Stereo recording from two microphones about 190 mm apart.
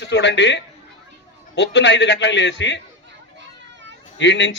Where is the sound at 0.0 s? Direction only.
65° left (ahead or behind).